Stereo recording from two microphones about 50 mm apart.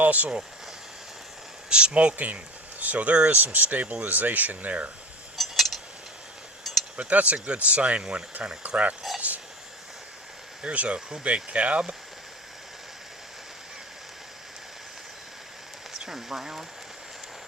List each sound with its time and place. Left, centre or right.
0.0 s speech: right
1.7 s speech: right
5.4 s a sound: centre
6.9 s speech: right
10.6 s speech: right
15.9 s speech: centre